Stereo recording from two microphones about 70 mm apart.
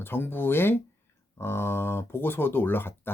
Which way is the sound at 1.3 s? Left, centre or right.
Left.